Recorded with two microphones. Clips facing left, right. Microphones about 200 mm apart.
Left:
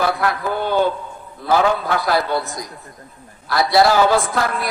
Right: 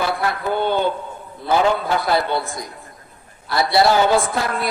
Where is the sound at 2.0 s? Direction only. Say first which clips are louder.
Left 2 dB; 25° right (ahead or behind).